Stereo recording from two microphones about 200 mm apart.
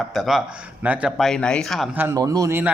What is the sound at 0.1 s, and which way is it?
Speech, centre (ahead or behind).